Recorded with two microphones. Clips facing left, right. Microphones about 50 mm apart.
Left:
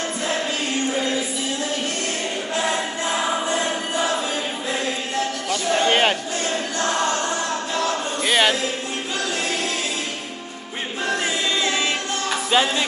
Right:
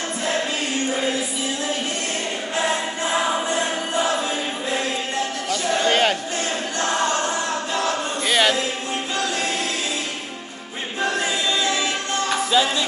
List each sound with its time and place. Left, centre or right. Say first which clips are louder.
5.5 s music: left 1 dB; left
8.3 s music: even; centre
11.2 s choir: even; left
12.4 s music: left 2 dB; left